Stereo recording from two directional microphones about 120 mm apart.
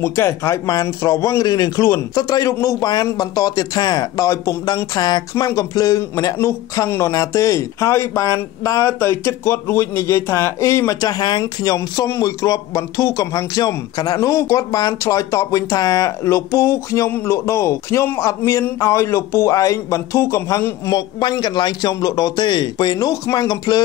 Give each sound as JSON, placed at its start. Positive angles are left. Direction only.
{"t": 0.0, "sound": "a man's voice", "side_deg": 20}